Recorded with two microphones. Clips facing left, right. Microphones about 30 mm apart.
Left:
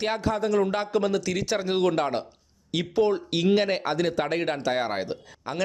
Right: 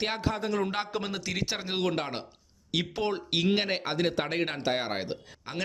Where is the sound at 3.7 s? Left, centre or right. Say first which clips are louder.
Left 3 dB; centre.